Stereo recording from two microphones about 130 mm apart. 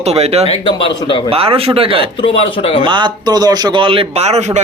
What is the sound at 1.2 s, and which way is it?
Speech, 45° right (ahead or behind).